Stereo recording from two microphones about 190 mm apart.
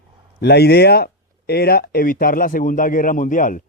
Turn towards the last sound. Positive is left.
turn(degrees=45)  # may be behind; listen again after turning